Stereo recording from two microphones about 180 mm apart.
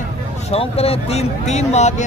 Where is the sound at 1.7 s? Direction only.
40° left (ahead or behind).